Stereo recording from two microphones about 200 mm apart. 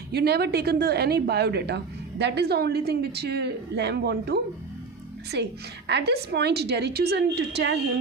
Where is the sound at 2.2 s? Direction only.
55° right (ahead or behind).